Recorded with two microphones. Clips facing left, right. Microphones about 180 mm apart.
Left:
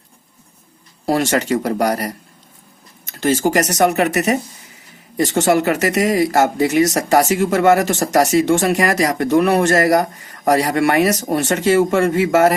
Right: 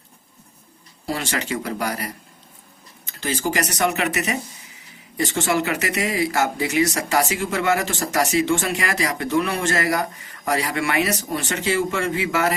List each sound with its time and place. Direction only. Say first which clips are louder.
1.1 s speech: left 9 dB; 45° left (ahead or behind)
3.1 s a sound: left 10 dB; 50° left (ahead or behind)
3.5 s speech: left 7 dB; 40° left (ahead or behind)
9.0 s speech: left 6 dB; 55° left (ahead or behind)